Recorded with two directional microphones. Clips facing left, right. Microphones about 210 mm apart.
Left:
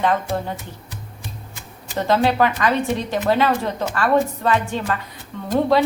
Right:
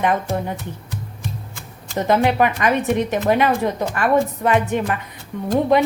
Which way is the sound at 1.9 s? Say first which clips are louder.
Right 1 dB; 15° right (ahead or behind).